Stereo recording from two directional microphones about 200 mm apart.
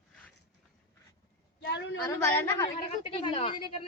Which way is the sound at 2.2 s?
10° left (ahead or behind).